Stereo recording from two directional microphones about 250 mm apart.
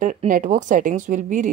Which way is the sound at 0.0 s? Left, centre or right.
Right.